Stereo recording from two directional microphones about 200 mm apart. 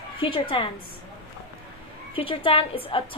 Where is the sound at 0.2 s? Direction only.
25° left (ahead or behind).